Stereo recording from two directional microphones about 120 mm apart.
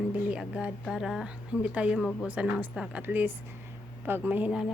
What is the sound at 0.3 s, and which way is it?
Speech, 10° right (ahead or behind).